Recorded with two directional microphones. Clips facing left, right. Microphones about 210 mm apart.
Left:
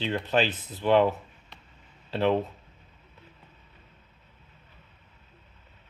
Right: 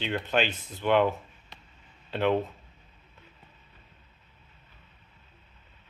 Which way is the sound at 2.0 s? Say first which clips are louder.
Left 1 dB; 30° left (ahead or behind).